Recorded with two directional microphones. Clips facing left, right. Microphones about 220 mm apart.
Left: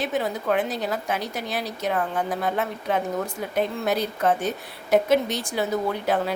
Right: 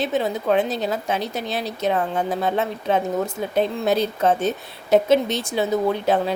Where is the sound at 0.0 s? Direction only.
25° right (ahead or behind).